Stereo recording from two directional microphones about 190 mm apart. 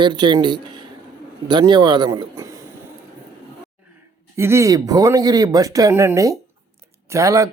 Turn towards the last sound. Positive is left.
turn(degrees=-15)  # may be behind; listen again after turning